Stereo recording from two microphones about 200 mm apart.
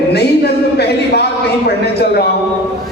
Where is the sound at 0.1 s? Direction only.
55° left (ahead or behind).